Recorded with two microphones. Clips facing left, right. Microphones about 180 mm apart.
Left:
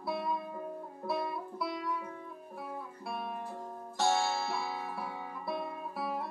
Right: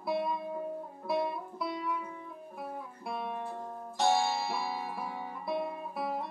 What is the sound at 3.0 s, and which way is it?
Music, 20° right (ahead or behind).